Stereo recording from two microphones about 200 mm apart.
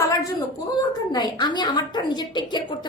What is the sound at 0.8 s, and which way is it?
A woman's voice, 20° left (ahead or behind).